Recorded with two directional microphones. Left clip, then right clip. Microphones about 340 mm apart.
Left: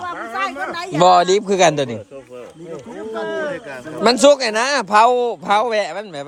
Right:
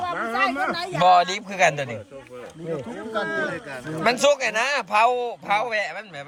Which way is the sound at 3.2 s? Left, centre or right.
Centre.